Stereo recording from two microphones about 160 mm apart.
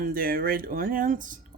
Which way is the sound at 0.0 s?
65° right (ahead or behind).